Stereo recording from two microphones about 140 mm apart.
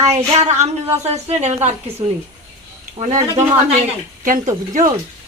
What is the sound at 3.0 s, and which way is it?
Speech, 50° right (ahead or behind).